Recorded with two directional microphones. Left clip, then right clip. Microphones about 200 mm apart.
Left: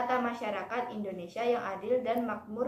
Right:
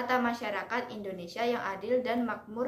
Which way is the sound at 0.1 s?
25° right (ahead or behind).